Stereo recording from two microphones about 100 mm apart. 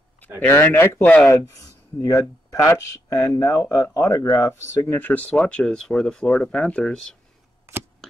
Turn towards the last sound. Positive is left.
turn(degrees=10)  # may be behind; listen again after turning